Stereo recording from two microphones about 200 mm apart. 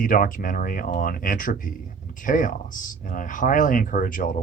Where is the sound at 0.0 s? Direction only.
45° left (ahead or behind).